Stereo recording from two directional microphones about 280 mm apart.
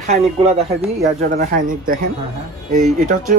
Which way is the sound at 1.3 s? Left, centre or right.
Right.